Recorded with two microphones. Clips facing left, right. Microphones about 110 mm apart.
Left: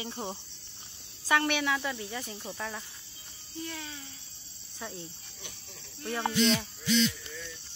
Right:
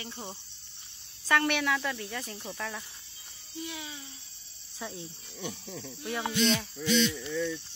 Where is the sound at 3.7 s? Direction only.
10° right (ahead or behind).